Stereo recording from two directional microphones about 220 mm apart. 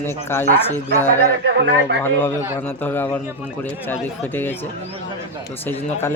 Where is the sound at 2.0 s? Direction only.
10° left (ahead or behind).